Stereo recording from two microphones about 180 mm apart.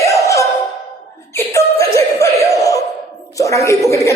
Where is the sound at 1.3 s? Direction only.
15° left (ahead or behind).